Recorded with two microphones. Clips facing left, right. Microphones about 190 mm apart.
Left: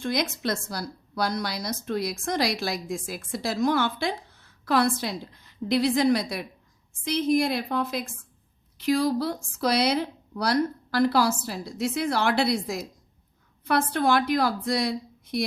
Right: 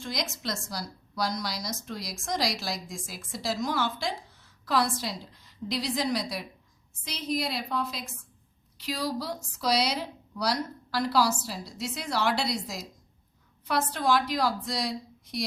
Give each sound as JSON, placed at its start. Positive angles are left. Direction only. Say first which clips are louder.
{"t": 0.0, "sound": "a woman's voice", "louder": "left 7 dB", "side_deg": 60}